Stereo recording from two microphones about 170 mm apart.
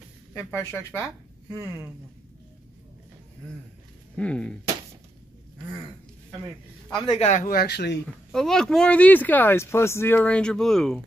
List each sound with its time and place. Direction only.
0.3 s speech: 10° left (ahead or behind)
4.2 s speech: 5° left (ahead or behind)
7.1 s speech: 40° left (ahead or behind); by 8.0 s 80° left
8.3 s speech: 5° left (ahead or behind)